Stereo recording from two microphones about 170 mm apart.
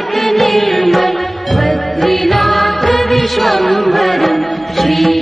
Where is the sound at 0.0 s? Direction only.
Centre (ahead or behind).